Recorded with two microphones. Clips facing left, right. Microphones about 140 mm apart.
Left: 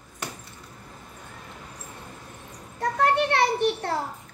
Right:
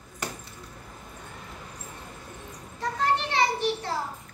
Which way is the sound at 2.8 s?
60° left (ahead or behind).